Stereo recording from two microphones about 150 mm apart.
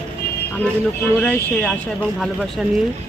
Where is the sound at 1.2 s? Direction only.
5° left (ahead or behind).